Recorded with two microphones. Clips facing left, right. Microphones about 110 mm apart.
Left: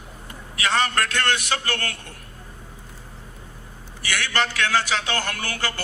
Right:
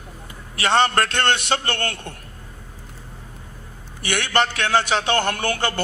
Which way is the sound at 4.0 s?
25° right (ahead or behind).